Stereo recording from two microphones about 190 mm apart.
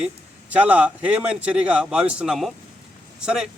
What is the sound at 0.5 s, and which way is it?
A man's voice, 5° right (ahead or behind).